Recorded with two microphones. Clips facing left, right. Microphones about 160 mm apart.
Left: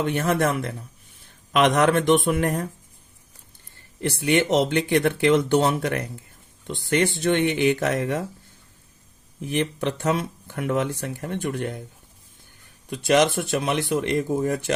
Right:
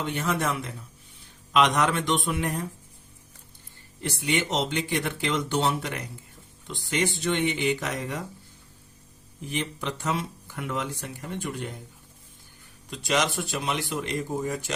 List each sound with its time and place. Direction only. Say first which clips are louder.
0.0 s speech: left 6 dB; 55° left (ahead or behind)
4.0 s speech: left 7 dB; 60° left (ahead or behind)
9.5 s speech: left 7 dB; 60° left (ahead or behind)
12.9 s speech: left 7 dB; 55° left (ahead or behind)